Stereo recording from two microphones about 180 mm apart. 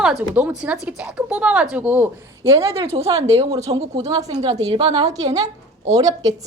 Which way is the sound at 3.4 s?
20° right (ahead or behind).